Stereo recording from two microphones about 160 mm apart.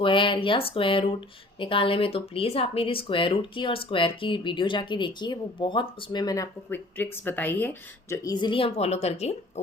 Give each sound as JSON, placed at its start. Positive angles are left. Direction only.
{"t": 0.0, "sound": "speech", "side_deg": 30}